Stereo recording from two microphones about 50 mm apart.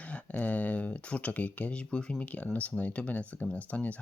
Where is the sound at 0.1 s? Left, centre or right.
Left.